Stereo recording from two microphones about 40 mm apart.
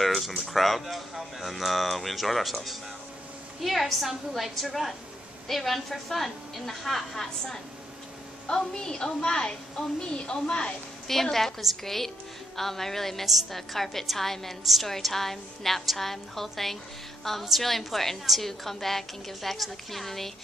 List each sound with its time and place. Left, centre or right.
0.0 s a sound: centre
0.5 s a woman's voice: centre
8.5 s a woman's voice: centre
11.1 s a woman's voice: centre